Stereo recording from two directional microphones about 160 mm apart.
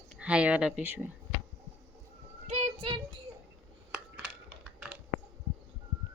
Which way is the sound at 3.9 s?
5° right (ahead or behind).